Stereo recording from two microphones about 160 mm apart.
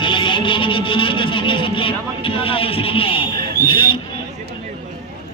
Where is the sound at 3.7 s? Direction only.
30° left (ahead or behind).